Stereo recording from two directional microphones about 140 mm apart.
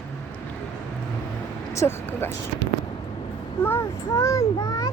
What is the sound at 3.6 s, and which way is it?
Speech, 15° left (ahead or behind).